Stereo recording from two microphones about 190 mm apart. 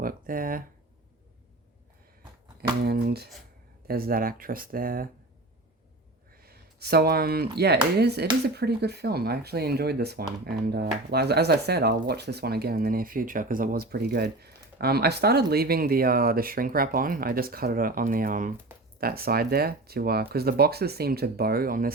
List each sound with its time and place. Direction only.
0.0 s speech: 45° right (ahead or behind)
2.6 s speech: 55° right (ahead or behind)
6.4 s speech: 55° right (ahead or behind)